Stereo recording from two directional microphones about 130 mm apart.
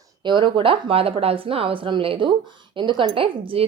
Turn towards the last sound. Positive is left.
turn(degrees=-45)  # may be behind; listen again after turning